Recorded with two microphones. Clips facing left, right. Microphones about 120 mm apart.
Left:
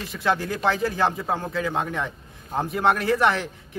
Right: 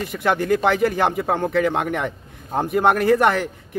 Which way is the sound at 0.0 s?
55° right (ahead or behind).